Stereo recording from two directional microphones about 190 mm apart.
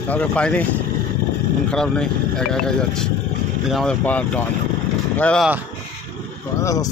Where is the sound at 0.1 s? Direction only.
5° left (ahead or behind).